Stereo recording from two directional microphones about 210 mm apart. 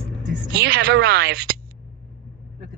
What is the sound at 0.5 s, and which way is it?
Speech, 50° right (ahead or behind).